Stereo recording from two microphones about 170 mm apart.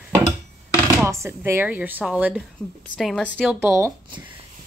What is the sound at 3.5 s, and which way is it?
Speech, 15° right (ahead or behind).